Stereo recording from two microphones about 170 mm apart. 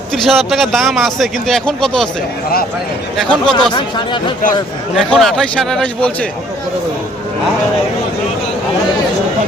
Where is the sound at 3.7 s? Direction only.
30° left (ahead or behind).